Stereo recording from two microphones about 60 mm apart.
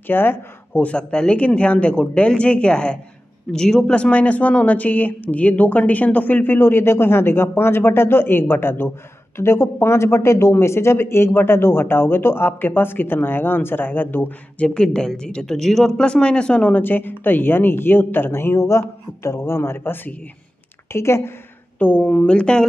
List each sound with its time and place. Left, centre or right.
0.0 s speech: left
0.8 s speech: centre; by 14.3 s left
14.6 s speech: centre
16.0 s speech: centre
16.7 s speech: left
21.7 s speech: left